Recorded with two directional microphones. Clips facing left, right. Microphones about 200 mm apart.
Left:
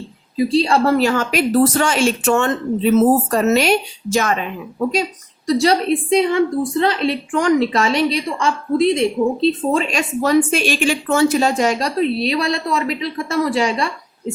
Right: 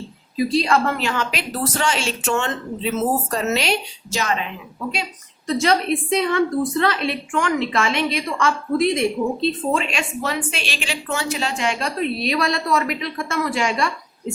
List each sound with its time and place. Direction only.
0.3 s a woman's voice: 30° left (ahead or behind); by 4.4 s 50° left (ahead or behind)
5.5 s a woman's voice: 35° left (ahead or behind)